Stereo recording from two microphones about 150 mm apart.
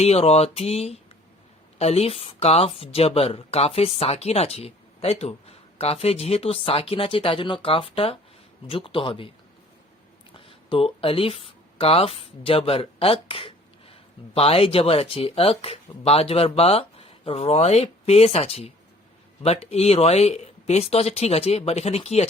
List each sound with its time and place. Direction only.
0.0 s speech: 45° left (ahead or behind)
10.3 s speech: 35° left (ahead or behind)